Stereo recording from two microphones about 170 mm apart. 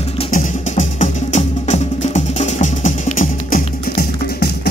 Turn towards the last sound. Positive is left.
turn(degrees=65)  # may be behind; listen again after turning